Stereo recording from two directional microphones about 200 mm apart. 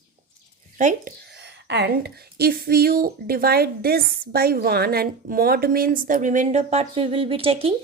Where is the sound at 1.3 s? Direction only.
55° right (ahead or behind).